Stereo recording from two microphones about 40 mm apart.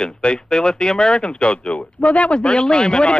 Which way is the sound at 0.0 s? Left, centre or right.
Left.